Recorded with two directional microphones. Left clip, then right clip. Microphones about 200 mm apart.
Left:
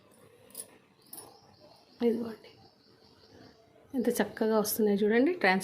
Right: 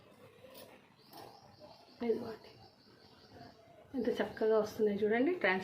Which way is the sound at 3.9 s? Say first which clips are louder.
Left 5 dB; 50° left (ahead or behind).